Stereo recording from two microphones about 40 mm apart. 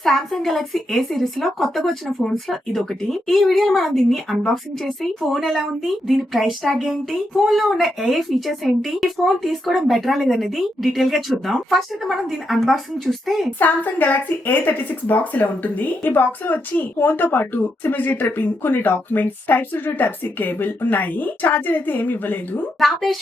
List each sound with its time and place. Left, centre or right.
0.0 s a woman's voice: centre
5.2 s speech: centre
13.6 s speech: left
22.8 s speech: centre